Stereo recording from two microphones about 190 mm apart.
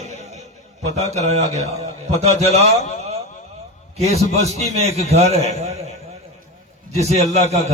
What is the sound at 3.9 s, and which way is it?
A man's voice, 35° right (ahead or behind).